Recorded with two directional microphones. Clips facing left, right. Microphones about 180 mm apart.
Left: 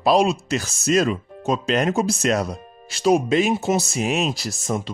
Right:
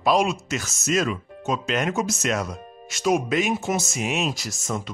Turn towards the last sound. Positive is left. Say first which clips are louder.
# left 3 dB
turn(degrees=35)  # may be behind; listen again after turning